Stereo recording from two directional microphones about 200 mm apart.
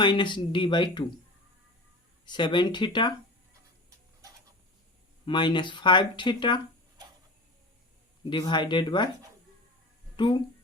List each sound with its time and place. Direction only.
0.0 s speech: 25° left (ahead or behind)
2.2 s speech: 25° left (ahead or behind)
5.2 s speech: 25° left (ahead or behind)
8.2 s speech: 25° left (ahead or behind)
10.2 s speech: 25° left (ahead or behind)